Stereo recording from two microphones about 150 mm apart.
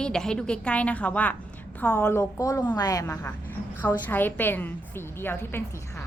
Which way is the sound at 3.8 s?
10° left (ahead or behind).